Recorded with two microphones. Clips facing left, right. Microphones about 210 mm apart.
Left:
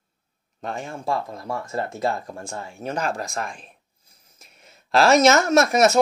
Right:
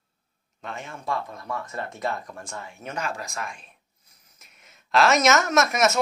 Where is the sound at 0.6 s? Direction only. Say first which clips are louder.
Left 6 dB; 35° left (ahead or behind).